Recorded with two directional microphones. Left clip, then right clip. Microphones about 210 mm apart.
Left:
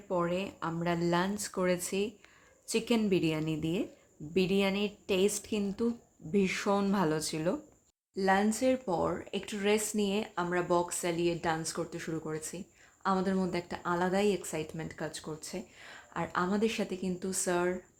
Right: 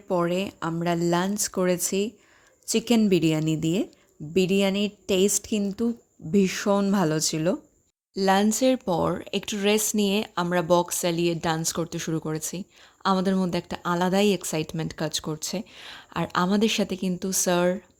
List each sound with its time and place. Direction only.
0.1 s speech: 45° right (ahead or behind)